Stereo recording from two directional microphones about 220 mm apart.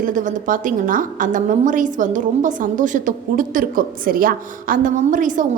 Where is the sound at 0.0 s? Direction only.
35° right (ahead or behind).